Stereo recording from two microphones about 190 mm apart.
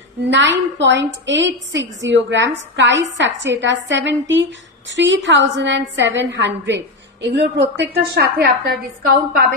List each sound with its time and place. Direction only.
0.3 s a woman's voice: 70° right (ahead or behind)